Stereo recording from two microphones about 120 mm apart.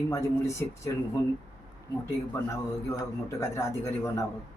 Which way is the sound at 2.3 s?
20° left (ahead or behind).